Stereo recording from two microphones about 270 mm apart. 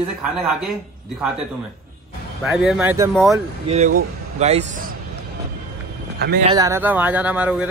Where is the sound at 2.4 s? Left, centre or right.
Centre.